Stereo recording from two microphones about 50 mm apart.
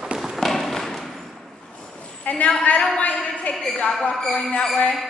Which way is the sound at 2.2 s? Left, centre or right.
Left.